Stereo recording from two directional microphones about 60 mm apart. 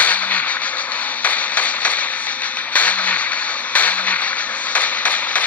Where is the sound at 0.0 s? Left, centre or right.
Left.